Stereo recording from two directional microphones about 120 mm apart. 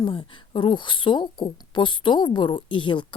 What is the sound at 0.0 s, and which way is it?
A woman's voice, 40° left (ahead or behind).